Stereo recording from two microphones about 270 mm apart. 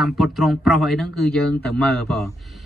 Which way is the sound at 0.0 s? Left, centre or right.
Centre.